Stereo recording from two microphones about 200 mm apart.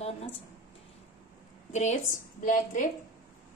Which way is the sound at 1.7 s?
40° left (ahead or behind).